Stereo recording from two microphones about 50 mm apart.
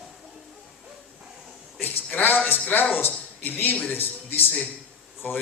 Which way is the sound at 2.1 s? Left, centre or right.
Left.